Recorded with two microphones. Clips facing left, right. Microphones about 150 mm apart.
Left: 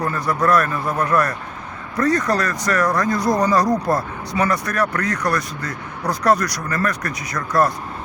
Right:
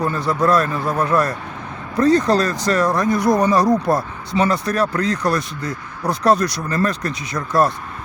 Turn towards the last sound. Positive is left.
turn(degrees=-25)  # may be behind; listen again after turning